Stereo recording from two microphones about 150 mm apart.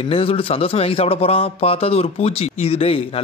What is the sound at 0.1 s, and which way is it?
A man's voice, 40° left (ahead or behind).